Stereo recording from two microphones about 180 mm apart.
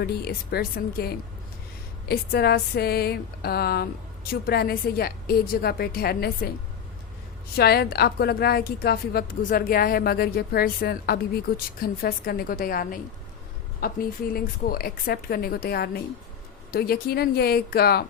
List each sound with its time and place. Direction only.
0.0 s a woman's voice: 60° left (ahead or behind)
7.5 s a woman's voice: 60° left (ahead or behind)